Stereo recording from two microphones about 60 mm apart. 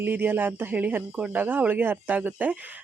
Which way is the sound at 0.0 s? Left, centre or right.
Right.